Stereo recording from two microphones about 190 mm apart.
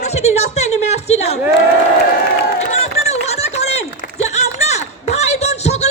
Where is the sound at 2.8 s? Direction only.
35° left (ahead or behind).